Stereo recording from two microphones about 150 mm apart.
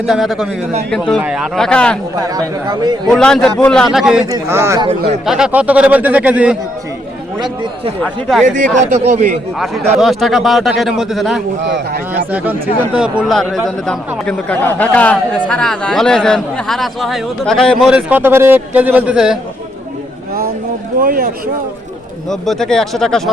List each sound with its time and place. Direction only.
0.0 s a man's voice: centre (ahead or behind)
1.2 s speech: 10° right (ahead or behind)
1.5 s speech: 5° left (ahead or behind)
2.1 s speech: 25° right (ahead or behind)
3.1 s a man's voice: 5° left (ahead or behind)
4.3 s speech: 15° right (ahead or behind)
5.2 s speech: 5° right (ahead or behind)
7.3 s speech: 30° right (ahead or behind)
8.4 s a man's voice: 55° right (ahead or behind)
9.6 s a man's voice: centre (ahead or behind)
11.9 s speech: 90° right
12.3 s a man's voice: 10° right (ahead or behind)
21.0 s speech: 75° right (ahead or behind)
22.3 s a man's voice: 5° left (ahead or behind)